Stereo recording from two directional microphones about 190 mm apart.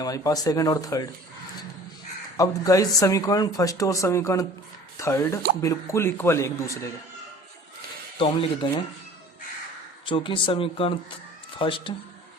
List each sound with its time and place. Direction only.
0.0 s speech: 20° left (ahead or behind)
2.4 s speech: 20° left (ahead or behind)
8.2 s speech: 25° left (ahead or behind)
10.1 s speech: 25° left (ahead or behind)